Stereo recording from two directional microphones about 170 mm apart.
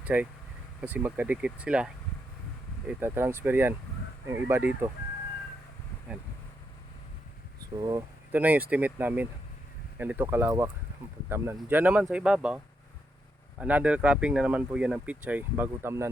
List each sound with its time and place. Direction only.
0.0 s speech: 10° right (ahead or behind)
7.8 s speech: 20° right (ahead or behind)
8.4 s speech: 10° right (ahead or behind)
13.6 s speech: 10° right (ahead or behind)